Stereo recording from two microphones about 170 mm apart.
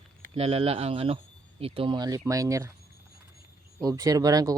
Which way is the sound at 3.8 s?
20° right (ahead or behind).